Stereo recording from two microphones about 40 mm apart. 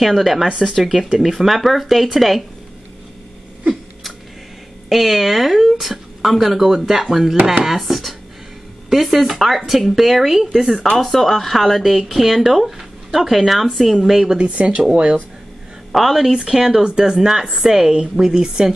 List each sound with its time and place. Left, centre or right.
0.0 s a woman's voice: centre
4.8 s a woman's voice: centre
11.0 s a woman's voice: centre
14.4 s speech: right
14.8 s speech: right
15.9 s a woman's voice: centre
16.3 s speech: centre